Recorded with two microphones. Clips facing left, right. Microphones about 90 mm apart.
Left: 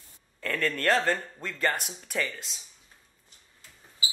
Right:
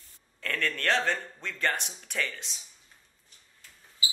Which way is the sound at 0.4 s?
5° left (ahead or behind).